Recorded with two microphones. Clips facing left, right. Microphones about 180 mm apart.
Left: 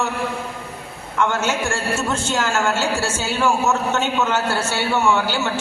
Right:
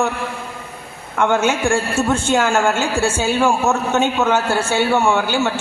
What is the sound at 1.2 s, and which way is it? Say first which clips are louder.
A woman's voice: right 4 dB; 55° right (ahead or behind).